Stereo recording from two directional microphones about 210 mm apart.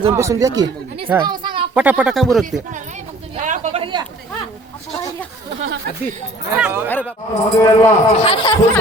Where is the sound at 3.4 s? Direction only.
35° right (ahead or behind).